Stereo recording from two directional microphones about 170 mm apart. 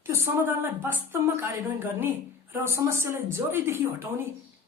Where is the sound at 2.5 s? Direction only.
15° right (ahead or behind).